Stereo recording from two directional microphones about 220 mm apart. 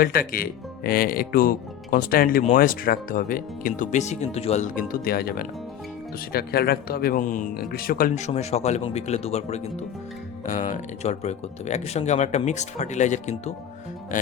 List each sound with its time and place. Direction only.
0.0 s speech: 40° left (ahead or behind)